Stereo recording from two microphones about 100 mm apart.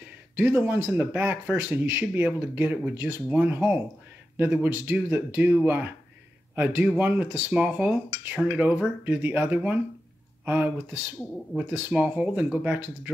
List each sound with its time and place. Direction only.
0.4 s speech: 15° right (ahead or behind)